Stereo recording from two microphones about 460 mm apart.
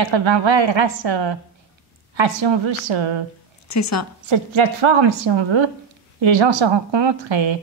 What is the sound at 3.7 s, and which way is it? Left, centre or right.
Speech, left.